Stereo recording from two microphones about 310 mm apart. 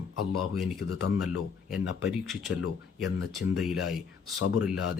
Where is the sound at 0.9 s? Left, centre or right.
Left.